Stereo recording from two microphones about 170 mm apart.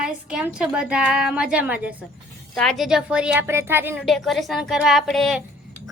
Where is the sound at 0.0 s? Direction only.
5° right (ahead or behind).